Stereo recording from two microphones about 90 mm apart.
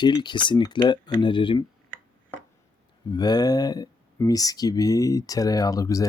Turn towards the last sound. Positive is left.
turn(degrees=40)  # may be behind; listen again after turning